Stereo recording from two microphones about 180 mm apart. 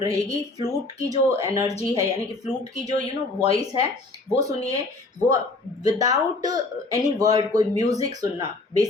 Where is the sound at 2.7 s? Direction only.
20° right (ahead or behind).